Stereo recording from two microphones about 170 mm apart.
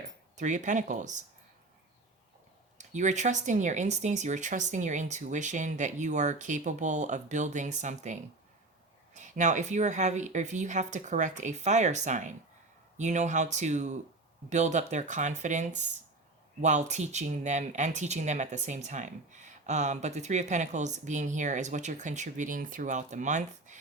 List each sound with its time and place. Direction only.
0.3 s speech: 45° right (ahead or behind)
2.7 s speech: 45° right (ahead or behind)